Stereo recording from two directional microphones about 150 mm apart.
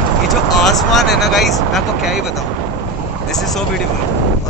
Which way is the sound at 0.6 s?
Centre (ahead or behind).